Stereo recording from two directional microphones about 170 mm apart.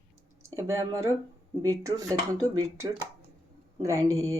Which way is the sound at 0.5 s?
15° right (ahead or behind).